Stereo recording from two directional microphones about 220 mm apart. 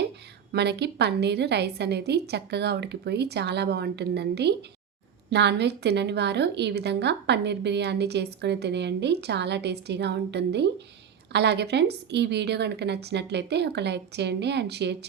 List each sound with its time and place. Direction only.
0.5 s a woman's voice: 50° right (ahead or behind)